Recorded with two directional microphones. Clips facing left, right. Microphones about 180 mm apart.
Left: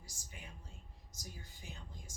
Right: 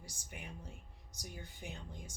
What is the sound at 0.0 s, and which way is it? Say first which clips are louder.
Speech: right 5 dB; 65° right (ahead or behind).